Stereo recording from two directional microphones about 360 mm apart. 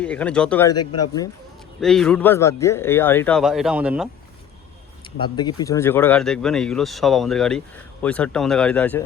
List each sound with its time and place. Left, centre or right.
0.0 s speech: centre
0.8 s speech: left
1.8 s speech: centre
5.2 s speech: centre